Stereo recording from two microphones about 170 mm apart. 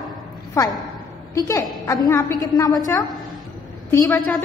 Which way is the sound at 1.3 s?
20° left (ahead or behind).